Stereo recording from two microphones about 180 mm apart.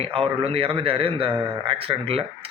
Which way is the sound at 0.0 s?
30° right (ahead or behind).